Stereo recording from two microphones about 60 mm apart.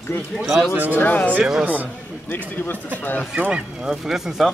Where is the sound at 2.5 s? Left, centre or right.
Left.